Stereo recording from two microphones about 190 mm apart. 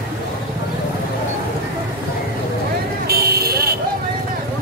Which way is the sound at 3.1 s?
55° right (ahead or behind).